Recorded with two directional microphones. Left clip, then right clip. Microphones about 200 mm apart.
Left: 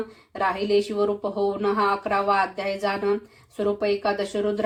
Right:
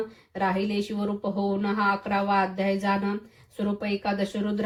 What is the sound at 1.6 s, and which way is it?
Speech, 35° left (ahead or behind).